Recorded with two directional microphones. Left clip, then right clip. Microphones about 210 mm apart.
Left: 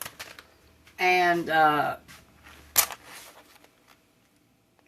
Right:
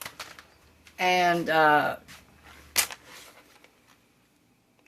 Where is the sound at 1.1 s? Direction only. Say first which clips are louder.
Left 1 dB; 40° right (ahead or behind).